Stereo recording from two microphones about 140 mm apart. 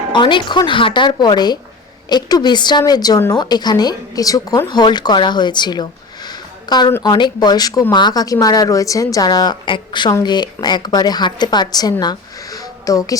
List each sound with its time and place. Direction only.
0.1 s a woman's voice: 35° left (ahead or behind)